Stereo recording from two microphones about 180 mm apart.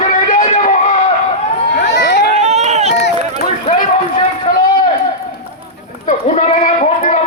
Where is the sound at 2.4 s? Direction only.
40° right (ahead or behind).